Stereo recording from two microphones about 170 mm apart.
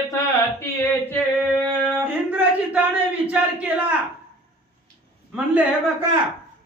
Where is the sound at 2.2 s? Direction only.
10° right (ahead or behind).